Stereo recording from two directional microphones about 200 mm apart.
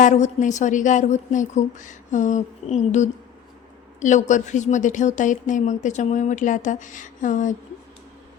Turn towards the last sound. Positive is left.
turn(degrees=40)  # may be behind; listen again after turning